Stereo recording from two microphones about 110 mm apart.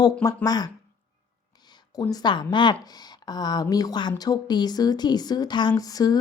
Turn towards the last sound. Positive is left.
turn(degrees=35)  # may be behind; listen again after turning